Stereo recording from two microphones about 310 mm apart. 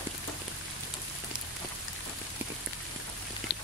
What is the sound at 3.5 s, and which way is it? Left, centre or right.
Biting, left.